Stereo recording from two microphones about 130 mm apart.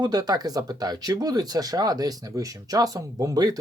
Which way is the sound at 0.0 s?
30° right (ahead or behind).